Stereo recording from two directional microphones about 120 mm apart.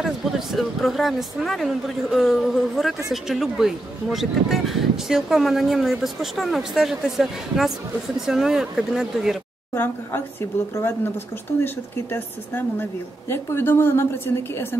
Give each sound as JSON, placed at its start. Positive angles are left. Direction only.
{"t": 0.0, "sound": "speech", "side_deg": 0}
{"t": 10.7, "sound": "a woman's voice", "side_deg": 20}